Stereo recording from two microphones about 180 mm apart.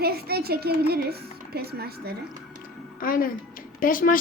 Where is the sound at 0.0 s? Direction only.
60° right (ahead or behind).